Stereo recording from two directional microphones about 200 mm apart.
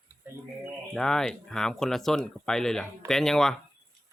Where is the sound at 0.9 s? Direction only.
5° left (ahead or behind).